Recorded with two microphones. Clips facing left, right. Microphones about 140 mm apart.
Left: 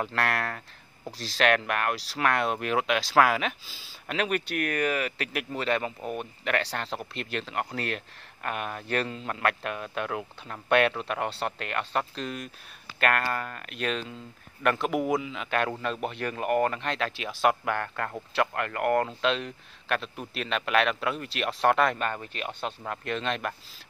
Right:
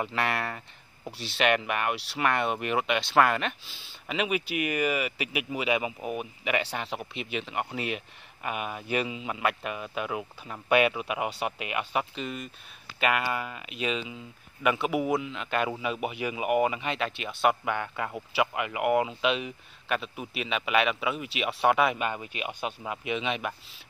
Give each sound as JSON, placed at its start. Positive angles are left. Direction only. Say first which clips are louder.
{"t": 0.0, "sound": "speech", "louder": "left 1 dB", "side_deg": 0}